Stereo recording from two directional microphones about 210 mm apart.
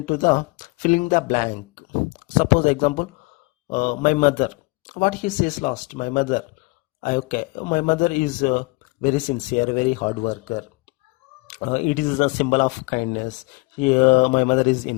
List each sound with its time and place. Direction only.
0.0 s speech: 40° left (ahead or behind)